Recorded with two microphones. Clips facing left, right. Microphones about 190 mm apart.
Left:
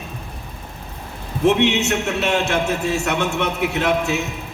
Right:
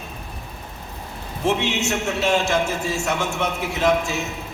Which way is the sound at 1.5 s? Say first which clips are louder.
Left 5 dB; 65° left (ahead or behind).